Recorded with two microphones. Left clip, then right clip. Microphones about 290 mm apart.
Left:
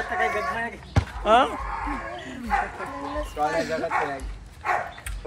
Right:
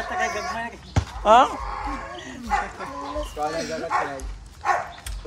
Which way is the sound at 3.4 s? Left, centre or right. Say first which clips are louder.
Left 3 dB; left.